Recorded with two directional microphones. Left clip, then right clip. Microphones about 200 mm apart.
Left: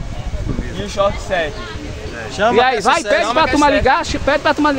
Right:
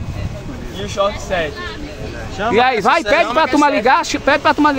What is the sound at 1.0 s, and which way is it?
Speech, centre (ahead or behind).